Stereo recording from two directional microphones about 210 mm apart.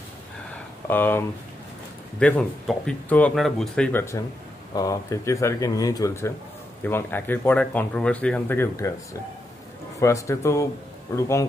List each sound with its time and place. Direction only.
0.8 s speech: 10° left (ahead or behind)
9.9 s speech: 15° left (ahead or behind)